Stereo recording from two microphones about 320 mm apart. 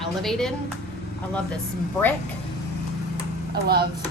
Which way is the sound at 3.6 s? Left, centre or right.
Right.